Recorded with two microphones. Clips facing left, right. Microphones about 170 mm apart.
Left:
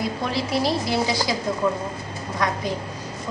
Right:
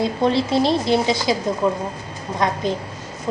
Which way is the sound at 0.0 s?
25° right (ahead or behind).